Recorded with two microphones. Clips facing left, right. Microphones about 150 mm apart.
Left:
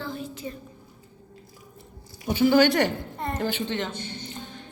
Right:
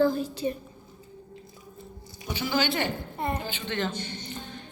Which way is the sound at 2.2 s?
55° left (ahead or behind).